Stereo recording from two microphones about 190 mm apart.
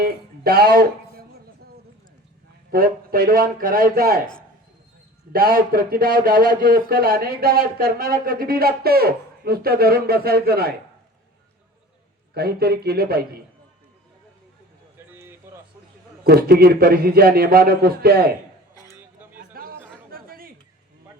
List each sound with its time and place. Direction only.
0.0 s speech: 55° right (ahead or behind)
2.7 s speech: 50° right (ahead or behind)
5.3 s speech: 50° right (ahead or behind)
12.3 s a man's voice: 55° right (ahead or behind)
14.9 s a sound: 10° right (ahead or behind)
16.2 s speech: 55° right (ahead or behind)
18.7 s a sound: 20° left (ahead or behind)
18.9 s a sound: 10° right (ahead or behind)
19.4 s chatter: 50° right (ahead or behind)